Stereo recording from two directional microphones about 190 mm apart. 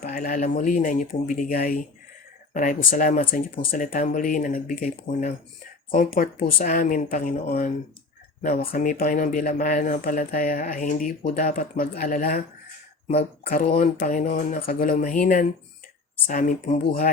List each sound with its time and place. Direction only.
0.0 s speech: 40° left (ahead or behind)
13.5 s speech: 50° left (ahead or behind)